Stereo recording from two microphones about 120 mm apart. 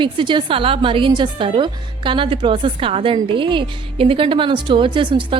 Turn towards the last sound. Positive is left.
turn(degrees=-45)  # may be behind; listen again after turning